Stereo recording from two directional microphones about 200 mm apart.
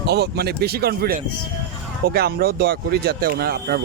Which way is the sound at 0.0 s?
55° right (ahead or behind).